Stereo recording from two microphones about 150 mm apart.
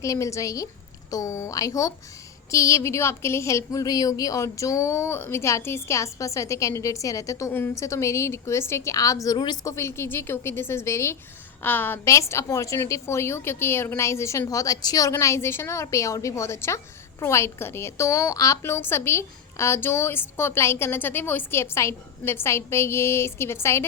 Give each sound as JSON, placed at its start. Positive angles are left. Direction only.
{"t": 0.0, "sound": "a woman's voice", "side_deg": 20}